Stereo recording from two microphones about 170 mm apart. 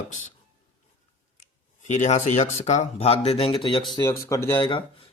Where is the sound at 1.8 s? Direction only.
45° left (ahead or behind).